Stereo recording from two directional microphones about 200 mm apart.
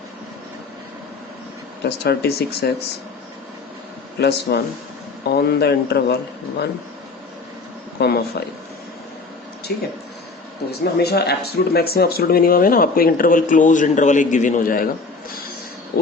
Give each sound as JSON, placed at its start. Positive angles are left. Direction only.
{"t": 1.8, "sound": "speech", "side_deg": 55}
{"t": 4.2, "sound": "speech", "side_deg": 55}
{"t": 7.9, "sound": "speech", "side_deg": 55}
{"t": 9.7, "sound": "speech", "side_deg": 50}